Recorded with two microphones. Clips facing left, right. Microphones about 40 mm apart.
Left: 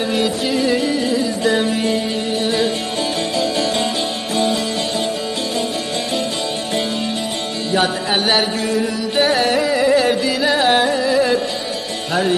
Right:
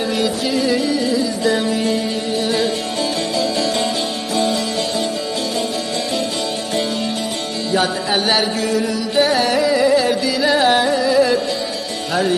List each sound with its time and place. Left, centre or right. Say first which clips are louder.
0.2 s music: even; centre
0.7 s music: even; left
7.7 s chant: even; left
10.4 s carnatic music: right 1 dB; centre